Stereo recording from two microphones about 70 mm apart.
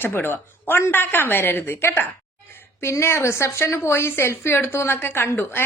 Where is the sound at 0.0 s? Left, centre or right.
Left.